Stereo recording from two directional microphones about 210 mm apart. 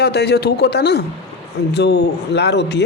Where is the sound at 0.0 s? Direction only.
50° left (ahead or behind).